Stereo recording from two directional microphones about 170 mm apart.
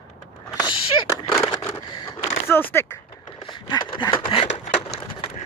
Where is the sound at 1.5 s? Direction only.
20° left (ahead or behind).